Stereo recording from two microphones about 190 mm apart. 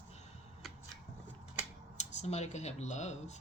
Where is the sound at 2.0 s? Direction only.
35° left (ahead or behind).